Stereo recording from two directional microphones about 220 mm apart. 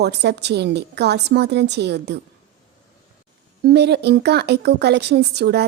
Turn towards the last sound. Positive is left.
turn(degrees=-50)  # may be behind; listen again after turning